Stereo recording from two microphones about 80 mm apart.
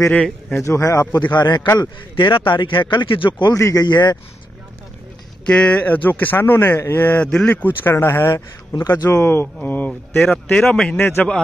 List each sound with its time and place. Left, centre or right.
0.1 s speech: centre
0.6 s speech: left
1.2 s a man's voice: left
1.8 s speech: left
3.5 s speech: left
3.8 s a man's voice: left
5.4 s speech: centre
10.2 s speech: centre